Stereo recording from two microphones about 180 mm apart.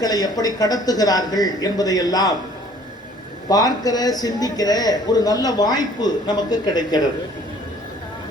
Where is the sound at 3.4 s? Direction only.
20° left (ahead or behind).